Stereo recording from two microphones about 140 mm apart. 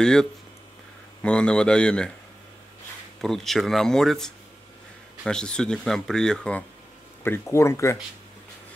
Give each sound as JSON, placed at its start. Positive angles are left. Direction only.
{"t": 0.0, "sound": "a man's voice", "side_deg": 5}
{"t": 3.2, "sound": "speech", "side_deg": 0}
{"t": 7.2, "sound": "speech", "side_deg": 15}